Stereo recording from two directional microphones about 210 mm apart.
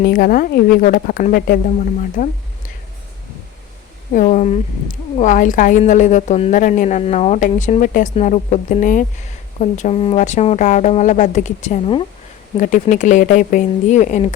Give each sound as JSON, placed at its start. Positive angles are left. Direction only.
{"t": 0.0, "sound": "a woman's voice", "side_deg": 45}
{"t": 4.1, "sound": "speech", "side_deg": 35}